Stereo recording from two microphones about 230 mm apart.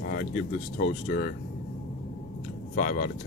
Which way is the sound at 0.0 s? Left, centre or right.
Left.